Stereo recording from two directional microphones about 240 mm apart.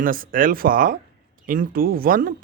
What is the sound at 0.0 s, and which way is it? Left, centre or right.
Speech, right.